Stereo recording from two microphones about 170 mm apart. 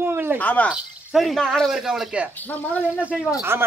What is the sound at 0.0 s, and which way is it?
Cricket, 10° right (ahead or behind).